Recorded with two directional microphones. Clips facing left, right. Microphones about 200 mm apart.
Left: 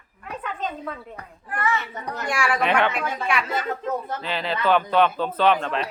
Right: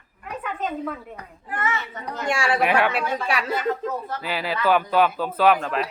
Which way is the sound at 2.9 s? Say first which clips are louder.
Right 1 dB; 35° right (ahead or behind).